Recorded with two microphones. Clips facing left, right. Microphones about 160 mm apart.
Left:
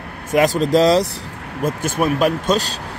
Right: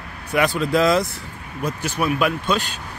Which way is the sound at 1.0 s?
70° left (ahead or behind).